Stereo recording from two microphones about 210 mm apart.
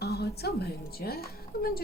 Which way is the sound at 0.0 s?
50° left (ahead or behind).